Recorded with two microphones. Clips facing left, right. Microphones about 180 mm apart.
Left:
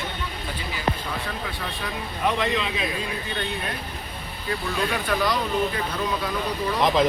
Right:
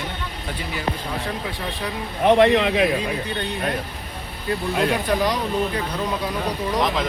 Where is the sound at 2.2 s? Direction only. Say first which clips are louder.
Right 10 dB; 65° right (ahead or behind).